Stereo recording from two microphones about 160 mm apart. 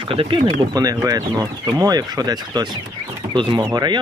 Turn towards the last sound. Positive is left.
turn(degrees=-25)  # may be behind; listen again after turning